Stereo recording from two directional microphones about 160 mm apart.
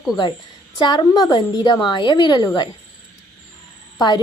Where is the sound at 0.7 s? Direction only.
25° left (ahead or behind).